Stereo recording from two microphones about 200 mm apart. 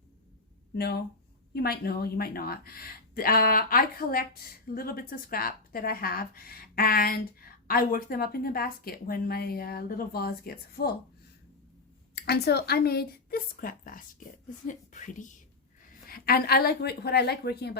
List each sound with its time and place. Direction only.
0.8 s speech: 55° left (ahead or behind)
12.1 s a woman's voice: 55° left (ahead or behind)